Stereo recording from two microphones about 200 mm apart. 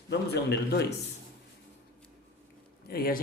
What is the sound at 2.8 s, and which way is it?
Speech, 50° left (ahead or behind).